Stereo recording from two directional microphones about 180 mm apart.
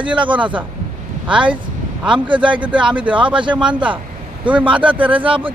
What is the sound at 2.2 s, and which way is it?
Speech, 25° right (ahead or behind).